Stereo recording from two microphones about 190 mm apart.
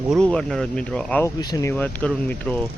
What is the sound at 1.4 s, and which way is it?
Speech, 20° left (ahead or behind).